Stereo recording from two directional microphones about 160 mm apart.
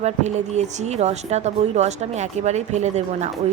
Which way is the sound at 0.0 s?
45° right (ahead or behind).